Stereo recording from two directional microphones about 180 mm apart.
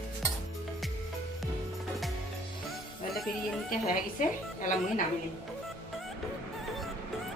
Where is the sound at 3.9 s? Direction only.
45° left (ahead or behind).